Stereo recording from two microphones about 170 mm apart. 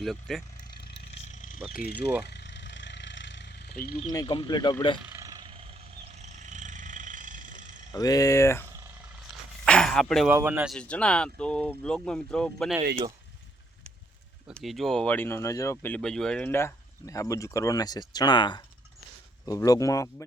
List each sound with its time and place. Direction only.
0.0 s speech: centre (ahead or behind)
1.3 s vehicle: 50° left (ahead or behind)
1.7 s speech: 60° left (ahead or behind)
2.0 s speech: 10° right (ahead or behind)
2.2 s vehicle: 85° left; by 4.1 s 55° left (ahead or behind)
4.1 s speech: 25° left (ahead or behind)
5.0 s a sound: 20° right (ahead or behind)
6.1 s vehicle: 40° right (ahead or behind)
7.9 s speech: 20° left (ahead or behind)
9.6 s a sound: 5° left (ahead or behind)
10.3 s speech: 10° right (ahead or behind)
10.7 s speech: 5° left (ahead or behind)
14.5 s speech: centre (ahead or behind); by 20.2 s 20° left (ahead or behind)